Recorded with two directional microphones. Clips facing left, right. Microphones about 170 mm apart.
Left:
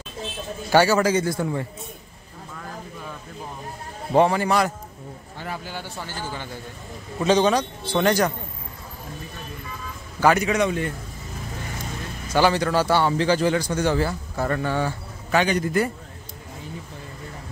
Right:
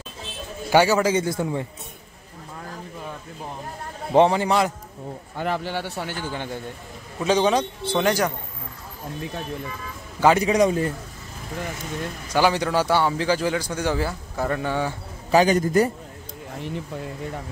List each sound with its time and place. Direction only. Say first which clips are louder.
0.7 s a man's voice: even; 15° right (ahead or behind)
4.1 s a man's voice: right 1 dB; 20° right (ahead or behind)
5.4 s a man's voice: right 7 dB; 75° right (ahead or behind); by 6.5 s 55° right (ahead or behind)
7.2 s a man's voice: left 1 dB; 10° right (ahead or behind)
10.2 s a man's voice: right 2 dB; 30° right (ahead or behind)
12.4 s a man's voice: left 1 dB; 10° right (ahead or behind)
15.3 s a man's voice: right 4 dB; 40° right (ahead or behind)
16.6 s a man's voice: right 8 dB; 70° right (ahead or behind)